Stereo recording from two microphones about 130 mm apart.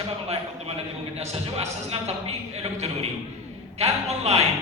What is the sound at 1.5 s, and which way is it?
Speech, 50° right (ahead or behind).